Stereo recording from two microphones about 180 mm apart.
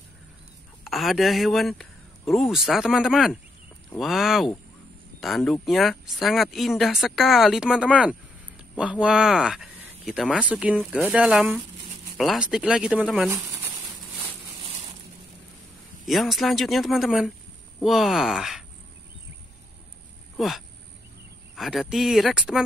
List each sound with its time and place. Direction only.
0.8 s speech: centre (ahead or behind)
13.3 s speech: 20° right (ahead or behind)
16.1 s speech: centre (ahead or behind)
20.3 s speech: centre (ahead or behind)